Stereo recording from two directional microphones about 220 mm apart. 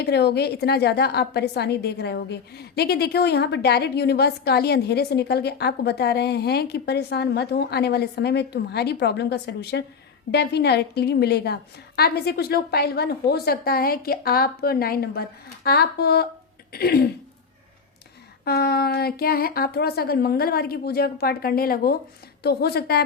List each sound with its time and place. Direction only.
0.0 s a woman's voice: 50° left (ahead or behind)
18.4 s a woman's voice: 45° left (ahead or behind)